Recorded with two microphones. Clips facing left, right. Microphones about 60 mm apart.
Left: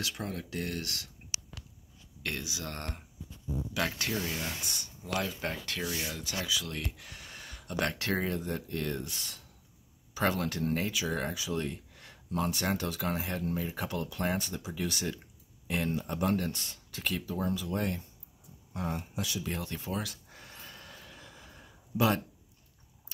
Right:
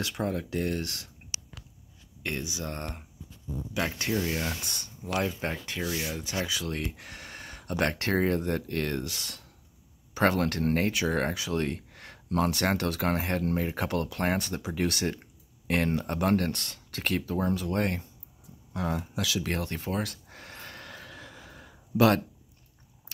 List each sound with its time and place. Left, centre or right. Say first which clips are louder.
0.0 s speech: right 6 dB; right
2.2 s speech: right 3 dB; right
3.7 s speech: right 2 dB; right
4.3 s speech: right 5 dB; right
5.4 s speech: right 3 dB; centre
6.1 s speech: right 3 dB; right
8.4 s speech: right 5 dB; right
9.0 s speech: right 4 dB; right
10.1 s speech: right 5 dB; right
18.7 s a sound: right 4 dB; right